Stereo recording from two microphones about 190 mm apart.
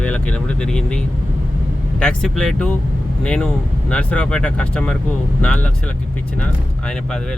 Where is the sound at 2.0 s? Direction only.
5° left (ahead or behind).